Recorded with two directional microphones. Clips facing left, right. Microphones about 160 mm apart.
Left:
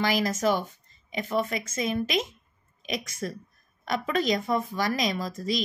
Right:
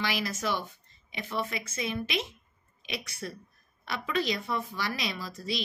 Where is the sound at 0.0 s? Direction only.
45° left (ahead or behind).